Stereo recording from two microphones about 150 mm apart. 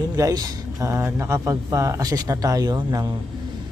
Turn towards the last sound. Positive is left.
turn(degrees=-25)  # may be behind; listen again after turning